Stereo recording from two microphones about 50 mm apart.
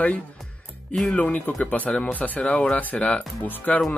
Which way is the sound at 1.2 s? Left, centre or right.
Left.